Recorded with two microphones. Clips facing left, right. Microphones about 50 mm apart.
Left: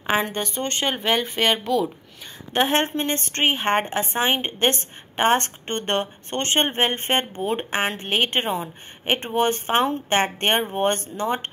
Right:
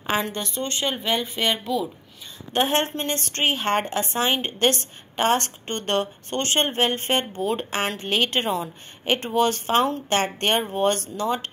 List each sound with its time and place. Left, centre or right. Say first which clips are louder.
0.2 s a woman's voice: left 2 dB; left